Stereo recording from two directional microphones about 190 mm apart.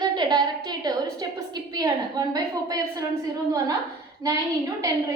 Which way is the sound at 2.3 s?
20° right (ahead or behind).